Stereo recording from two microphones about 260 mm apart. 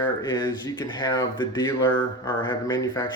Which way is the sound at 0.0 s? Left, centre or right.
Centre.